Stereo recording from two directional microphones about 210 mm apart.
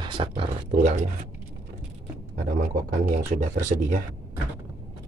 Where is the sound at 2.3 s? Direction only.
35° right (ahead or behind).